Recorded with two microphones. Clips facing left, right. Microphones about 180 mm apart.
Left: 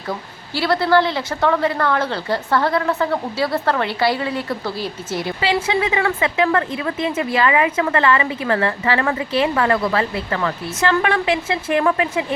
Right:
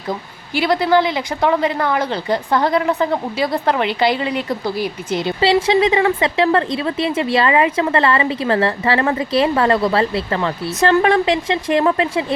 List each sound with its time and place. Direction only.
0.1 s a woman's voice: 15° right (ahead or behind)